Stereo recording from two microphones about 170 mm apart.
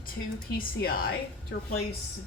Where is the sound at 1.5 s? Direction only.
90° left.